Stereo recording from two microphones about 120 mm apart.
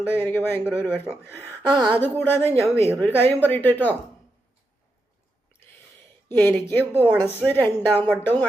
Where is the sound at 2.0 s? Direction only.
15° left (ahead or behind).